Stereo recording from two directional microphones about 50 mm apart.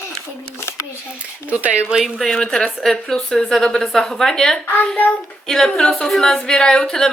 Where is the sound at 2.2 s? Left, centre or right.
Centre.